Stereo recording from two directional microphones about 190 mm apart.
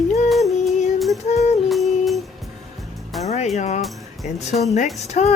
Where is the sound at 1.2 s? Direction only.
35° left (ahead or behind).